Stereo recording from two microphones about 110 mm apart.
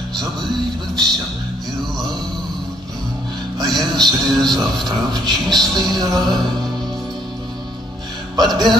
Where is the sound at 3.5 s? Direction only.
40° right (ahead or behind).